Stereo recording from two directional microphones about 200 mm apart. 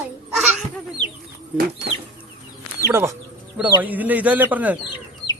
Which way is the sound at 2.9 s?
15° right (ahead or behind).